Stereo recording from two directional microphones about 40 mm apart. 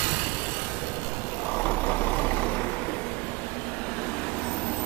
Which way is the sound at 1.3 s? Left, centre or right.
Left.